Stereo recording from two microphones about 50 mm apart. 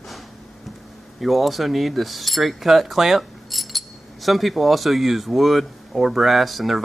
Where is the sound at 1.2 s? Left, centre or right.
Centre.